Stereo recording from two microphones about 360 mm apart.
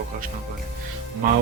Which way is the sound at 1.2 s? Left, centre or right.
Right.